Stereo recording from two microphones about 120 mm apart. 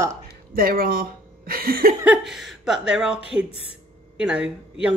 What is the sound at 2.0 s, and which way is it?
Speech, 5° right (ahead or behind).